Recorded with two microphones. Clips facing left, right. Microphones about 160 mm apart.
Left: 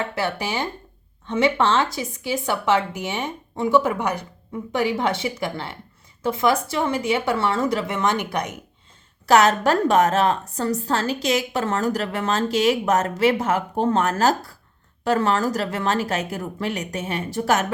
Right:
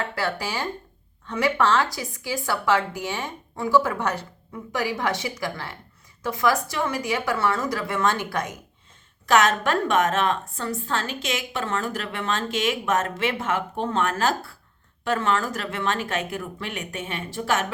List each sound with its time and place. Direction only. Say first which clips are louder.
0.0 s speech: left 2 dB; 20° left (ahead or behind)
4.7 s speech: left 4 dB; 25° left (ahead or behind)
9.2 s a woman's voice: left 4 dB; 35° left (ahead or behind)